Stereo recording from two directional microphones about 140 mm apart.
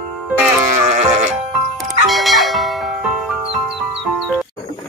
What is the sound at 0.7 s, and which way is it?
Music, 55° right (ahead or behind).